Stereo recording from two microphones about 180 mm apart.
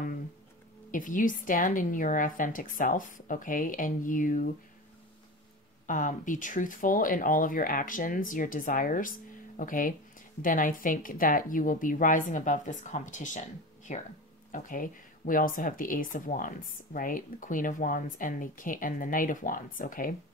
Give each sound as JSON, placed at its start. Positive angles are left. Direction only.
{"t": 0.9, "sound": "speech", "side_deg": 50}
{"t": 5.9, "sound": "speech", "side_deg": 45}